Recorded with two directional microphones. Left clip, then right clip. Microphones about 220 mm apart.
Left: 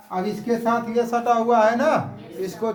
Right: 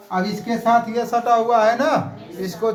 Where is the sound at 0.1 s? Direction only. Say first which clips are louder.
Right 1 dB; 10° left (ahead or behind).